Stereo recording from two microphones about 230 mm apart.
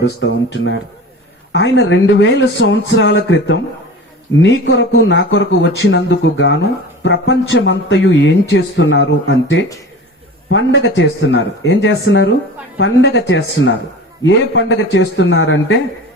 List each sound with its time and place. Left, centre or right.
0.0 s a man's voice: left